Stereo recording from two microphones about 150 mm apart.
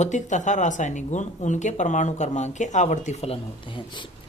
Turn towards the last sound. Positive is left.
turn(degrees=35)  # may be behind; listen again after turning